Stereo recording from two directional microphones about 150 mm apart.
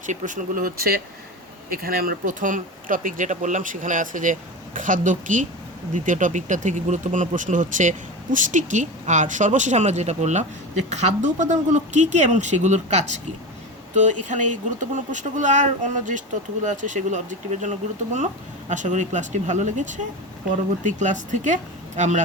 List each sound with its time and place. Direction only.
0.0 s speech: 60° right (ahead or behind)